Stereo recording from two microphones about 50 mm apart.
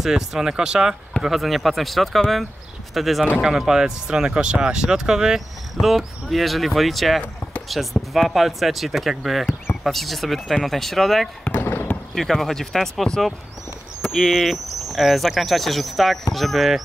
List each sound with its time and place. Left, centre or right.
0.0 s speech: centre
11.5 s basketball bounce: left
12.1 s speech: centre